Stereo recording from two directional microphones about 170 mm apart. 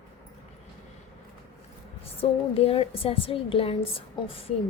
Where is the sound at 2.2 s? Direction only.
35° left (ahead or behind).